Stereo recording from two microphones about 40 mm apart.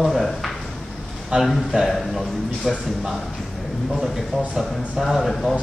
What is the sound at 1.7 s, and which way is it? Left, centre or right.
Speech, right.